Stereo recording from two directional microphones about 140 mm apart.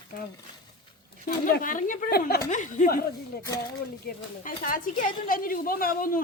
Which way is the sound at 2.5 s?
60° left (ahead or behind).